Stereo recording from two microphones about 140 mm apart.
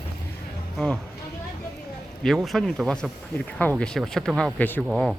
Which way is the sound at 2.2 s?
Centre (ahead or behind).